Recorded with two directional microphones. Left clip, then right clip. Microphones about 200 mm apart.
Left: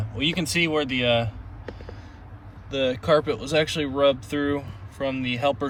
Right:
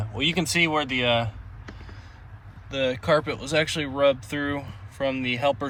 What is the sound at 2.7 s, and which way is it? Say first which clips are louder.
Speech: left 2 dB; 15° left (ahead or behind).